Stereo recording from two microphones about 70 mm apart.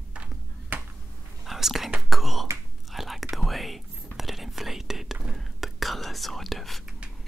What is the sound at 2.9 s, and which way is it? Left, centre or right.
Whispering, centre.